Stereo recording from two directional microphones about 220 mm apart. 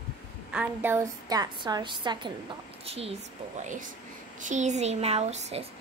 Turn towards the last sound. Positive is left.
turn(degrees=-30)  # may be behind; listen again after turning